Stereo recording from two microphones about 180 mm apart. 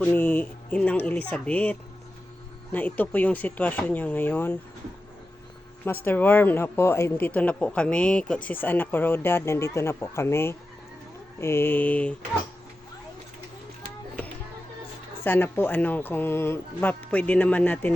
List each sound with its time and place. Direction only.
0.0 s speech: 10° left (ahead or behind)
6.1 s speech: 10° left (ahead or behind)
15.2 s speech: 10° left (ahead or behind)